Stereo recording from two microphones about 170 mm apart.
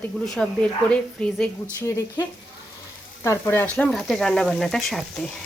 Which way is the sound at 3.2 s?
15° left (ahead or behind).